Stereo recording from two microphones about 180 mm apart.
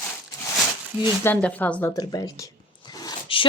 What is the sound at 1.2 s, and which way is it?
Speech, 10° left (ahead or behind).